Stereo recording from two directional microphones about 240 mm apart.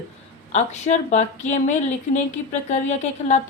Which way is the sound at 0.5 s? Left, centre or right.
Left.